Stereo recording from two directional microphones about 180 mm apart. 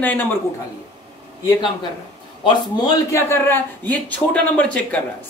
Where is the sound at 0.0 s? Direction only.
10° left (ahead or behind).